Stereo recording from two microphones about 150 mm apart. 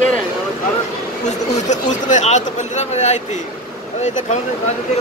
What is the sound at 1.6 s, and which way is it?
Speech, 55° left (ahead or behind).